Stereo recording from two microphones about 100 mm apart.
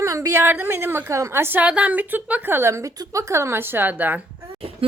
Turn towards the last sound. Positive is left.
turn(degrees=-15)  # may be behind; listen again after turning